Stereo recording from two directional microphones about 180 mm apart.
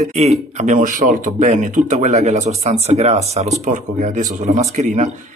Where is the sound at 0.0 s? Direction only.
35° right (ahead or behind).